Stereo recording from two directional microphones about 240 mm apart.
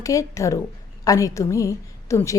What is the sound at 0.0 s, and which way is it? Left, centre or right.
A woman's voice, centre.